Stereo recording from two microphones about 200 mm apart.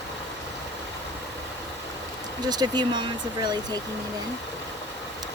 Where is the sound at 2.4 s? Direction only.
20° right (ahead or behind).